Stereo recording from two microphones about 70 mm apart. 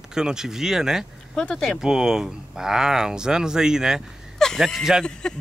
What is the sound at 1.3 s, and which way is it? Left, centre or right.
Speech, centre.